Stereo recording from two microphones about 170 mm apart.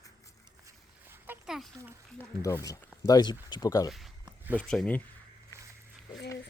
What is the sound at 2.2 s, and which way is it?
Speech, 15° left (ahead or behind).